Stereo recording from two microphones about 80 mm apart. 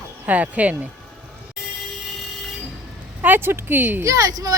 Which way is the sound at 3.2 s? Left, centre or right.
Right.